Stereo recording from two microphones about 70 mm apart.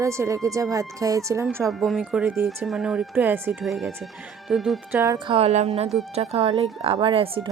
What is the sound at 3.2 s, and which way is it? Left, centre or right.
Speech, right.